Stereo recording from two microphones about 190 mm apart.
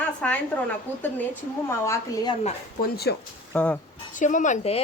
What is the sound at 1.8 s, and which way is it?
Speech, 15° left (ahead or behind).